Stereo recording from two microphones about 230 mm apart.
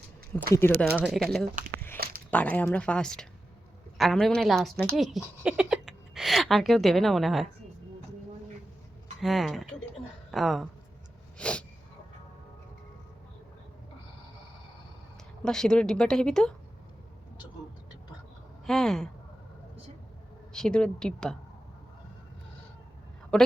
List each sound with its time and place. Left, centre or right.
0.3 s speech: centre
1.5 s a sound: right
2.3 s a woman's voice: centre
9.2 s speech: centre
11.3 s a sound: centre
15.4 s speech: centre
18.6 s speech: centre
20.5 s speech: centre
23.3 s a woman's voice: centre